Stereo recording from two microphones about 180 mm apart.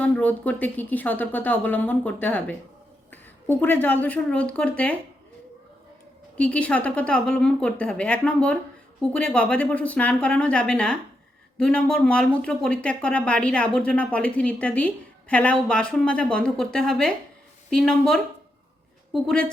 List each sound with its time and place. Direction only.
0.0 s a woman's voice: 10° left (ahead or behind)
6.3 s speech: 5° left (ahead or behind)